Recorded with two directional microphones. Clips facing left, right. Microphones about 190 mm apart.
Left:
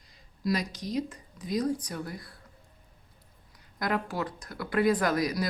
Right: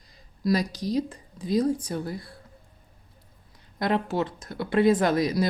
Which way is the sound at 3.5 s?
25° right (ahead or behind).